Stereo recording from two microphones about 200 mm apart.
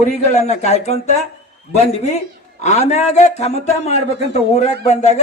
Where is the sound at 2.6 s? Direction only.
35° left (ahead or behind).